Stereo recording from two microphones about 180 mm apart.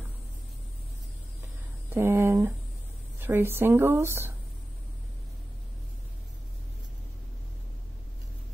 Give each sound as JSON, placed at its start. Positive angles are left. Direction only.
{"t": 2.0, "sound": "speech", "side_deg": -15}